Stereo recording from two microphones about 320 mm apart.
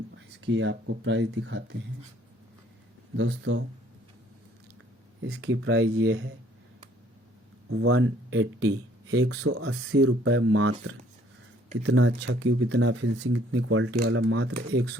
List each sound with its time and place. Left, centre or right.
0.3 s speech: right
3.2 s speech: right
5.2 s speech: right
7.7 s speech: right